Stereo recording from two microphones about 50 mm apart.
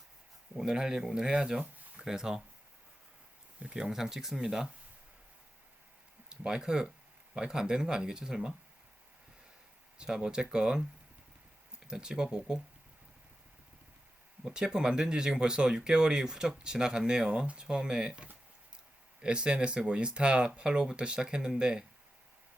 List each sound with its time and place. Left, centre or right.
0.5 s speech: centre
3.6 s speech: centre
6.2 s speech: centre
10.0 s speech: centre
11.9 s speech: centre
14.4 s speech: centre